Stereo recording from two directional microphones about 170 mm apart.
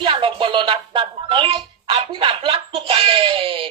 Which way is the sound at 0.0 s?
30° right (ahead or behind).